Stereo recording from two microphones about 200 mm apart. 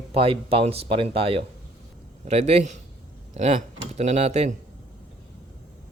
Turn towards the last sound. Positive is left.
turn(degrees=-30)  # may be behind; listen again after turning